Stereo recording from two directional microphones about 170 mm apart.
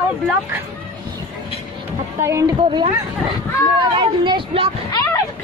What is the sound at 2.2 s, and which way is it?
Speech, 15° right (ahead or behind).